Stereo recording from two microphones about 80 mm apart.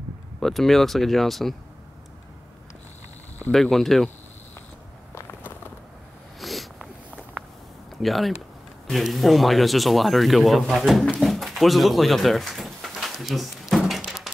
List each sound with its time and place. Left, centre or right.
0.4 s speech: centre
3.5 s speech: centre
6.4 s a sound: centre
7.4 s a sound: right
8.0 s speech: centre
11.1 s pigeon: centre